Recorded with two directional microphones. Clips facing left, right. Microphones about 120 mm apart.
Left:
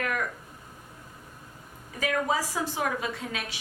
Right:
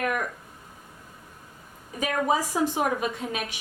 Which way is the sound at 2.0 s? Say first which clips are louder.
Right 2 dB; 20° right (ahead or behind).